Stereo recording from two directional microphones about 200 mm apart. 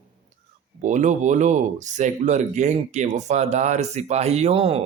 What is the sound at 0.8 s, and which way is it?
Speech, 40° right (ahead or behind).